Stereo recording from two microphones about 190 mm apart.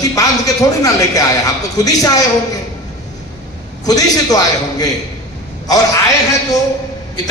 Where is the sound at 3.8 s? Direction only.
20° left (ahead or behind).